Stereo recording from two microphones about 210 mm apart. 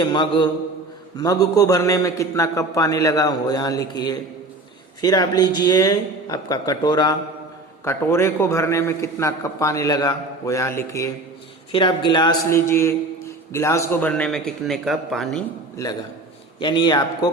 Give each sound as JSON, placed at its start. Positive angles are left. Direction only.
{"t": 0.0, "sound": "a man's voice", "side_deg": 20}
{"t": 16.6, "sound": "a man's voice", "side_deg": 20}